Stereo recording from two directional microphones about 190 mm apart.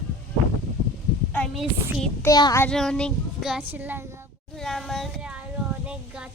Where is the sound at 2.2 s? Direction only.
20° left (ahead or behind).